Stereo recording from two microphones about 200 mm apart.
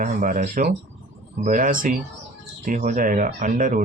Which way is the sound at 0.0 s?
40° right (ahead or behind).